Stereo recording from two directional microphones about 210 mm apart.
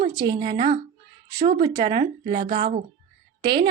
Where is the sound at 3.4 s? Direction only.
20° right (ahead or behind).